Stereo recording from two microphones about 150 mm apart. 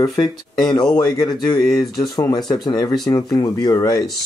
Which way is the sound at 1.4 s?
30° left (ahead or behind).